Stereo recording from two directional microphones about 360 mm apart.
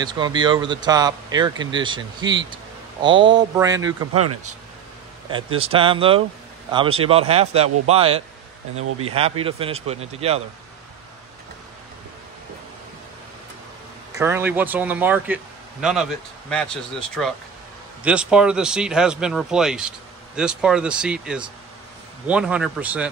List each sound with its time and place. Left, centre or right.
0.0 s speech: centre
4.1 s speech: right
5.3 s speech: centre
14.1 s speech: centre